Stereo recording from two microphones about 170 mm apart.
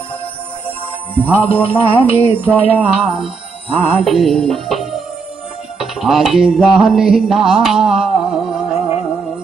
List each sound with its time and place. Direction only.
1.2 s music: 10° left (ahead or behind)
1.5 s music: 35° left (ahead or behind)
2.3 s music: 10° right (ahead or behind)